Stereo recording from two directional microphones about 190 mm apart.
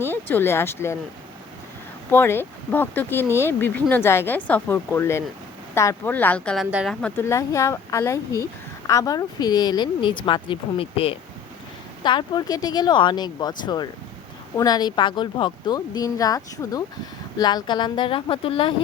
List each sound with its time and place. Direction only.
0.0 s speech: 10° left (ahead or behind)
2.0 s speech: 10° left (ahead or behind)
6.7 s speech: 5° right (ahead or behind)
7.0 s speech: 15° left (ahead or behind); by 18.7 s 30° left (ahead or behind)